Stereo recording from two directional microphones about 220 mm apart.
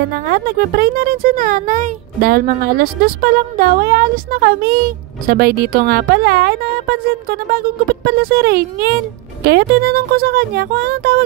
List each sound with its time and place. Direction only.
0.1 s a woman's voice: 45° right (ahead or behind)